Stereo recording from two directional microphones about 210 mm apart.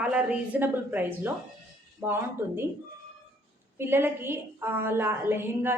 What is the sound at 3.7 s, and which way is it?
A woman's voice, 10° right (ahead or behind).